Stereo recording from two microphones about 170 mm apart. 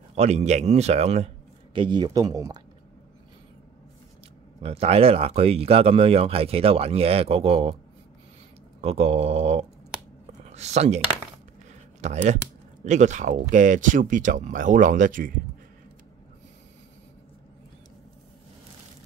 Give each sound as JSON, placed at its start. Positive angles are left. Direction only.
{"t": 0.1, "sound": "speech", "side_deg": -40}
{"t": 4.6, "sound": "speech", "side_deg": -35}
{"t": 8.8, "sound": "speech", "side_deg": -35}
{"t": 12.0, "sound": "speech", "side_deg": -45}